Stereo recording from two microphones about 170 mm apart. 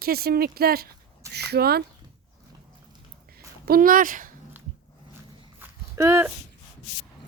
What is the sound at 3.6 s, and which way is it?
Speech, 60° right (ahead or behind).